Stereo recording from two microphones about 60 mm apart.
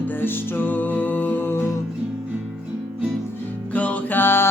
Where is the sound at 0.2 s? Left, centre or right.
Left.